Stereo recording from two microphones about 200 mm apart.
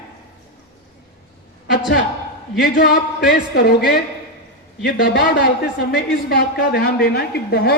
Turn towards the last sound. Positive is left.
turn(degrees=55)  # may be behind; listen again after turning